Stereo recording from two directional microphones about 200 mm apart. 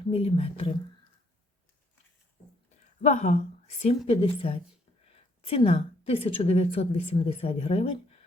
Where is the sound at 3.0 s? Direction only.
35° left (ahead or behind).